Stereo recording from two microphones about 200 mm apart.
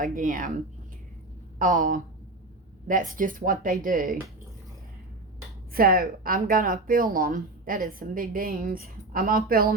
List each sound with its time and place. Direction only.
0.2 s speech: 40° right (ahead or behind)
5.7 s speech: 45° right (ahead or behind)